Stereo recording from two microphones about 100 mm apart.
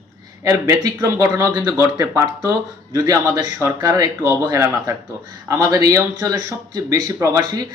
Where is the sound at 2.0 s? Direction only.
35° right (ahead or behind).